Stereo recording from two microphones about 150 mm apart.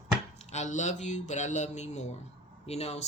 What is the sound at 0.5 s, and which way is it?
Speech, 50° left (ahead or behind).